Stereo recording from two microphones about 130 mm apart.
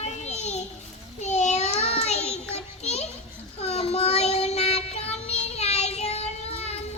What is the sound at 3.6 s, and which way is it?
Child singing, 50° left (ahead or behind).